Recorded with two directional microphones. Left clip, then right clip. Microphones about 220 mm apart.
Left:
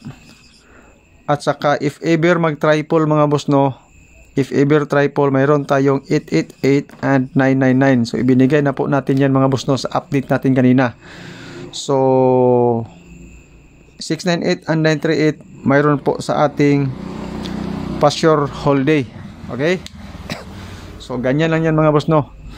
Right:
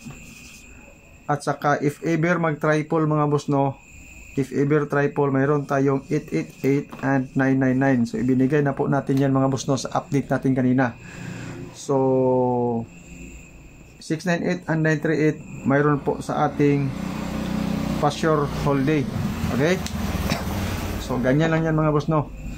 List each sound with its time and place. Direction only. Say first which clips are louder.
1.2 s speech: left 6 dB; 40° left (ahead or behind)
14.0 s speech: left 6 dB; 45° left (ahead or behind)
18.0 s speech: left 8 dB; 45° left (ahead or behind)
20.3 s a sound: left 1 dB; 40° left (ahead or behind)
21.0 s speech: left 4 dB; 40° left (ahead or behind)